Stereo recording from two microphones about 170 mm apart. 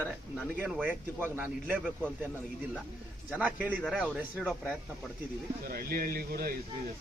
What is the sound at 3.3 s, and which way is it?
Speech, 10° right (ahead or behind).